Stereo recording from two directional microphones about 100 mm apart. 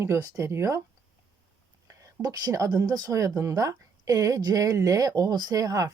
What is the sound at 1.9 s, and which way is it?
Speech, 35° right (ahead or behind).